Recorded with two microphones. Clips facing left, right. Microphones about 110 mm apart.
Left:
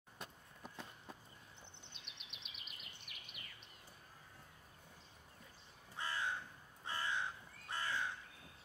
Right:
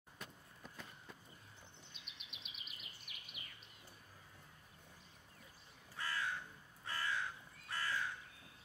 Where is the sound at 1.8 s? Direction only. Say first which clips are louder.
Left 1 dB; 5° right (ahead or behind).